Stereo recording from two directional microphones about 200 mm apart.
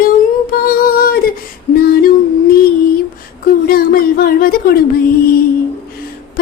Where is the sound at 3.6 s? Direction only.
45° left (ahead or behind).